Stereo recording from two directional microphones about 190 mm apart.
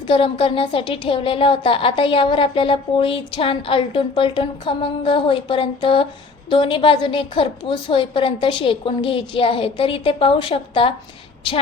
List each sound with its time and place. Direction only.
0.1 s speech: 30° left (ahead or behind)